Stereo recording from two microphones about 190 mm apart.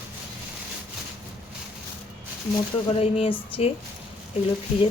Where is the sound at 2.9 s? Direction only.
30° left (ahead or behind).